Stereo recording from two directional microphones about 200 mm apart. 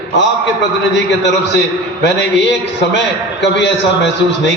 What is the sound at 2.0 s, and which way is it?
A man's voice, 60° left (ahead or behind).